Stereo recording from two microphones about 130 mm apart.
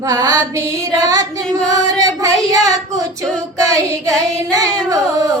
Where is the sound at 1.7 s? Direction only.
25° right (ahead or behind).